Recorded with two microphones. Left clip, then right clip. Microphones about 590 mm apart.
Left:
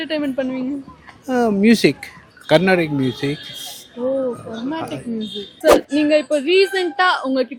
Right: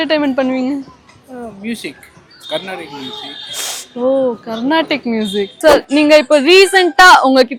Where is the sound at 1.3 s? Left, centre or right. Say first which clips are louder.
Left 11 dB; left.